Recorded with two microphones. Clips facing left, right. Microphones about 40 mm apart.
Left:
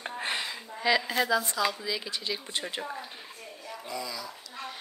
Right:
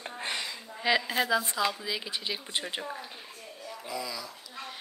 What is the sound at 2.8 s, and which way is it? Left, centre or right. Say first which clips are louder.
Speech: left 1 dB; centre.